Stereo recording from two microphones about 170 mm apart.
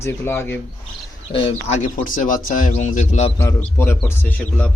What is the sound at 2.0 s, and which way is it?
A man's voice, 50° left (ahead or behind).